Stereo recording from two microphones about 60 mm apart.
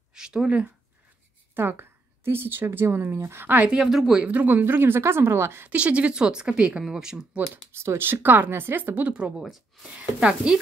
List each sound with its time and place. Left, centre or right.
0.1 s a sound: centre
1.5 s a woman's voice: right
3.4 s speech: right
3.7 s speech: centre
4.2 s speech: right
5.7 s speech: right
7.7 s speech: right
9.9 s speech: centre